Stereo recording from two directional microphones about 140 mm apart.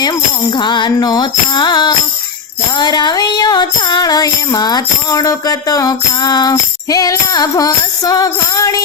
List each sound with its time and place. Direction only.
0.5 s music: 30° left (ahead or behind)